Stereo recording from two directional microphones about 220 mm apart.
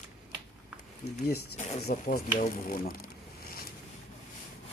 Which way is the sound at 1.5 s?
30° left (ahead or behind).